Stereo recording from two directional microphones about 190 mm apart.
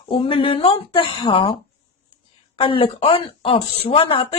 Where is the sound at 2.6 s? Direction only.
25° left (ahead or behind).